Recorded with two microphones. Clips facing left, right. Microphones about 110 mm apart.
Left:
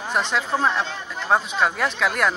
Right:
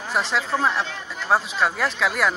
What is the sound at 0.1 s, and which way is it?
Speech, centre (ahead or behind).